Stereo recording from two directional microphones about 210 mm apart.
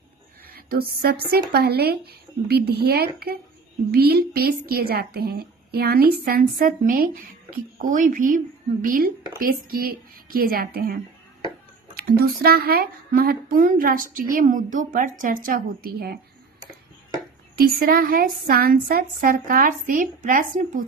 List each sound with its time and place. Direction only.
0.4 s a woman's voice: 45° right (ahead or behind)
17.6 s speech: 45° right (ahead or behind)